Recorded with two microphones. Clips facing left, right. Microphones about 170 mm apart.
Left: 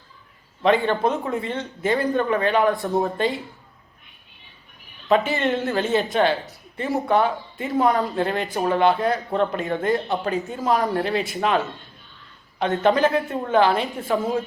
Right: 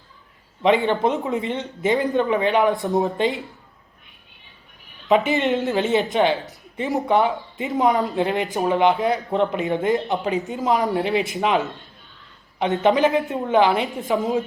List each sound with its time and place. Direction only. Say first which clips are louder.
0.6 s speech: right 1 dB; 20° right (ahead or behind)
2.7 s speech: right 1 dB; centre (ahead or behind)
3.2 s speech: right 1 dB; 20° right (ahead or behind)
5.0 s speech: right 2 dB; 20° right (ahead or behind)
12.5 s speech: right 1 dB; 15° right (ahead or behind)